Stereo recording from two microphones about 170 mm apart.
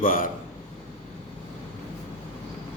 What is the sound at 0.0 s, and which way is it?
Speech, 55° left (ahead or behind).